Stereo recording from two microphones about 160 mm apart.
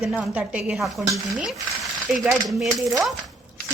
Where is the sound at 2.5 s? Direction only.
Centre (ahead or behind).